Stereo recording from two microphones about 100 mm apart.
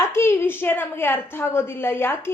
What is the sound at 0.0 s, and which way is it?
A woman's voice, 25° left (ahead or behind).